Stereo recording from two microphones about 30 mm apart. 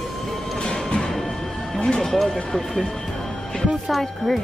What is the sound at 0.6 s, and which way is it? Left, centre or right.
Music, left.